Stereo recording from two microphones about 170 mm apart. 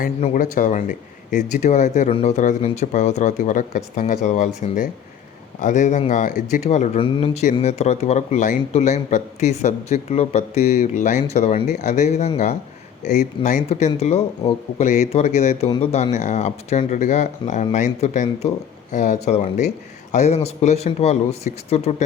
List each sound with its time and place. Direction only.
0.3 s a man's voice: 50° left (ahead or behind)
13.4 s a man's voice: 45° left (ahead or behind)